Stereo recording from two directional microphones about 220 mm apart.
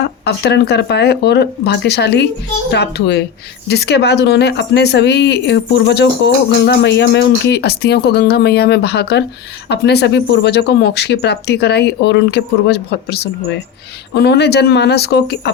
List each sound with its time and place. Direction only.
0.3 s speech: 50° left (ahead or behind)